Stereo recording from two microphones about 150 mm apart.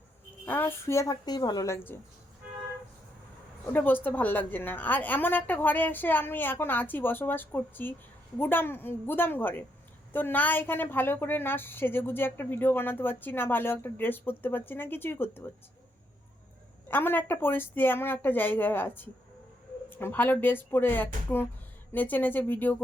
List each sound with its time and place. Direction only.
0.4 s speech: 15° left (ahead or behind)
3.7 s a woman's voice: 10° left (ahead or behind)
16.9 s a woman's voice: 15° left (ahead or behind)